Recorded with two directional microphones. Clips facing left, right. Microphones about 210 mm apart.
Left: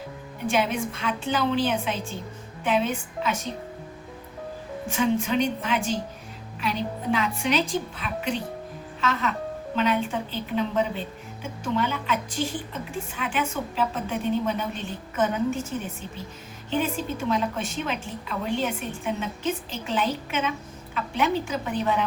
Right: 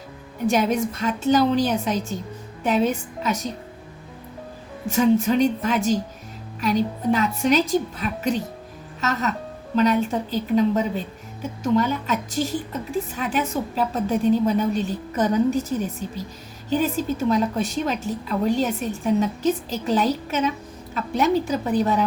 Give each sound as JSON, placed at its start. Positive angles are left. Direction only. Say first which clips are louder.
{"t": 0.4, "sound": "a woman's voice", "louder": "right 5 dB", "side_deg": -40}
{"t": 4.9, "sound": "a woman's voice", "louder": "right 6 dB", "side_deg": -40}